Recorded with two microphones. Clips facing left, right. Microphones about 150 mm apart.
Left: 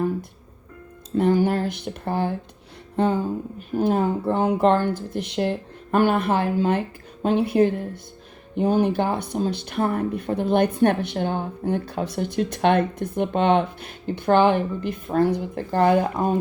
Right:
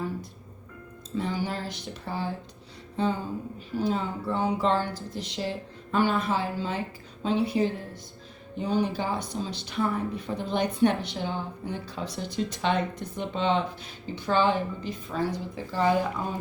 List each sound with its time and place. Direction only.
1.1 s speech: 55° left (ahead or behind)
2.9 s a sound: 60° left (ahead or behind)
3.8 s speech: 55° left (ahead or behind)